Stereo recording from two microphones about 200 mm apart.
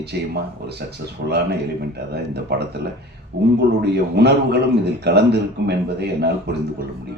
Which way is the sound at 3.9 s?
55° right (ahead or behind).